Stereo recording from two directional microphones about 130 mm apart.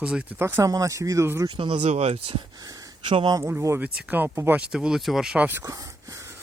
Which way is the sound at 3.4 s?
20° right (ahead or behind).